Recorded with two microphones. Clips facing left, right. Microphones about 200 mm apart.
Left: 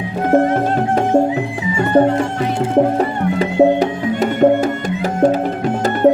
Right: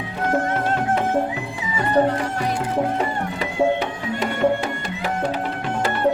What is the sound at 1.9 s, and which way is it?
Speech, 25° left (ahead or behind).